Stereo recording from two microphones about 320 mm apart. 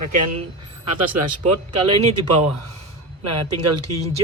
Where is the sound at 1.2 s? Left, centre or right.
Right.